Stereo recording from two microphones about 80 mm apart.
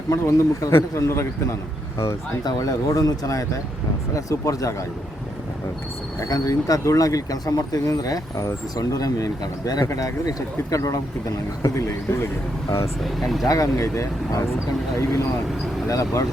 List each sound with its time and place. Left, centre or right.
0.2 s a man's voice: left
2.4 s speech: left
6.1 s speech: left
13.1 s speech: centre
13.4 s a man's voice: left